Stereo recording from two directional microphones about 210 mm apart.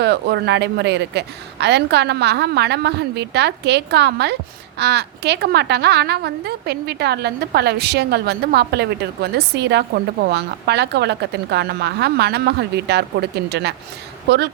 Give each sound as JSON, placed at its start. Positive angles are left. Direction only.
{"t": 0.0, "sound": "a woman's voice", "side_deg": -50}